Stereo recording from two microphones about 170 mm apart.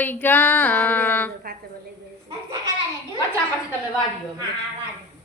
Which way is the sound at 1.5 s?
60° right (ahead or behind).